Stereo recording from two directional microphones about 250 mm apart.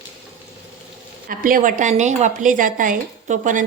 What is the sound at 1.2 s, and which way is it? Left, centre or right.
Speech, right.